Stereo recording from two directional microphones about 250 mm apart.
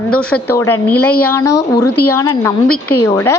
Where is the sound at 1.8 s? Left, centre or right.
Left.